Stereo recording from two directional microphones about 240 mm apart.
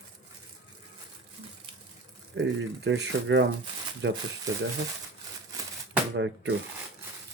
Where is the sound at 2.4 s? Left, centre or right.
Right.